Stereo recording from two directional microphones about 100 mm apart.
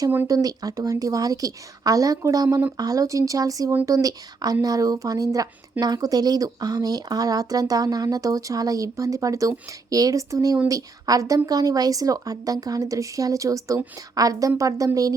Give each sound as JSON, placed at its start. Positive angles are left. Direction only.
{"t": 0.3, "sound": "speech", "side_deg": -35}